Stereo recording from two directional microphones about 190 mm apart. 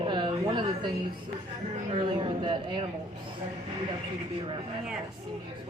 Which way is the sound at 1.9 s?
25° right (ahead or behind).